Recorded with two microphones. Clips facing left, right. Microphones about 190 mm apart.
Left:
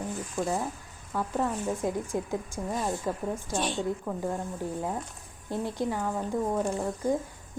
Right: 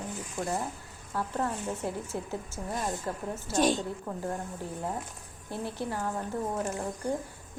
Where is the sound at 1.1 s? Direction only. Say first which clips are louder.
Left 3 dB; 10° left (ahead or behind).